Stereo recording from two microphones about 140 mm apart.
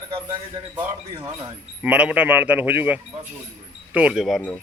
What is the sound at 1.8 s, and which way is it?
Speech, 10° right (ahead or behind).